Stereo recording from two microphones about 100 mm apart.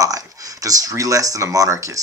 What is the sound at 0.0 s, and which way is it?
Speech, 35° right (ahead or behind).